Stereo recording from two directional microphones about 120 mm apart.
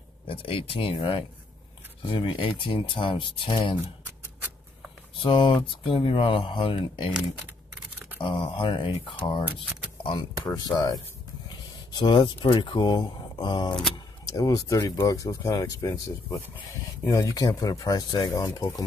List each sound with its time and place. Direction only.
0.3 s speech: 50° left (ahead or behind)
5.2 s speech: 45° left (ahead or behind)
8.2 s speech: 45° left (ahead or behind); by 18.9 s 30° left (ahead or behind)